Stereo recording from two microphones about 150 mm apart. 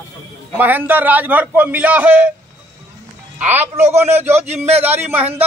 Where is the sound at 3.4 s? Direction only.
10° right (ahead or behind).